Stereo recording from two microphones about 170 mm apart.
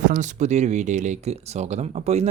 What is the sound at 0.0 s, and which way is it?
Speech, 50° right (ahead or behind).